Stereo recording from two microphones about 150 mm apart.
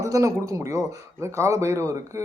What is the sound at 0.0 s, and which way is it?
Speech, 20° right (ahead or behind).